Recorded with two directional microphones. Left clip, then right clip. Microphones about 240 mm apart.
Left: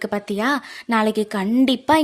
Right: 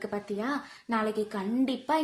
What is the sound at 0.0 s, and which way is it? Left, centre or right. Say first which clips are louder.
A woman's voice: left 11 dB; left.